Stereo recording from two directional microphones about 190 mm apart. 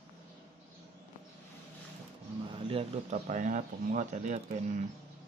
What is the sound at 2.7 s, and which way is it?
Speech, 35° right (ahead or behind).